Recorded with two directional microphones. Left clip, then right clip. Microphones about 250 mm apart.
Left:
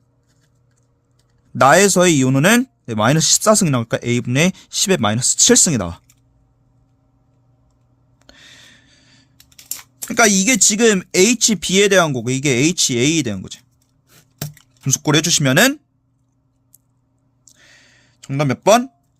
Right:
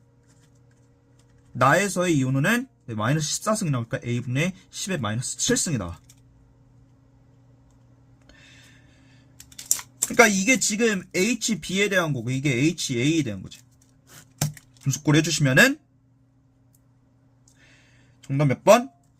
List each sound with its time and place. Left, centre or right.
1.5 s speech: left
8.3 s gasp: left
10.1 s speech: left
14.8 s speech: left
18.2 s speech: left